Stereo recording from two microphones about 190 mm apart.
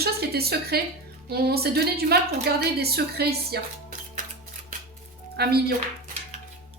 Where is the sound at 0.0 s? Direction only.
55° right (ahead or behind).